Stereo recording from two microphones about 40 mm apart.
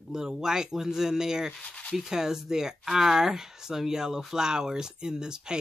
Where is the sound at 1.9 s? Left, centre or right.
Centre.